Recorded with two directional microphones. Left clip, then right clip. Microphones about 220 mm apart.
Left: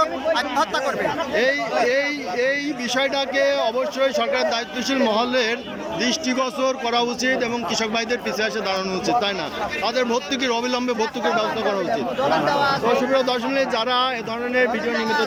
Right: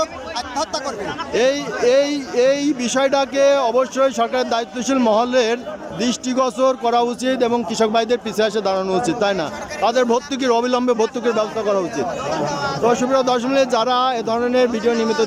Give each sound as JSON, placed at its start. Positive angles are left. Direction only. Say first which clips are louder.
{"t": 1.8, "sound": "speech", "louder": "right 9 dB", "side_deg": -15}
{"t": 12.5, "sound": "speech", "louder": "left 4 dB", "side_deg": 40}
{"t": 12.8, "sound": "speech", "louder": "right 3 dB", "side_deg": -10}
{"t": 14.9, "sound": "speech", "louder": "right 1 dB", "side_deg": 35}